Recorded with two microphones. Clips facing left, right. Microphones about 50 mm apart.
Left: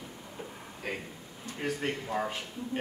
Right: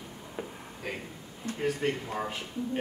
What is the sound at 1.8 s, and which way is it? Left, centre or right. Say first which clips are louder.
A man's voice: right 1 dB; centre.